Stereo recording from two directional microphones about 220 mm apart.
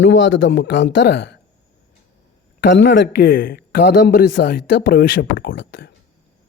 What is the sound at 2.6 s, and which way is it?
A man's voice, 50° left (ahead or behind).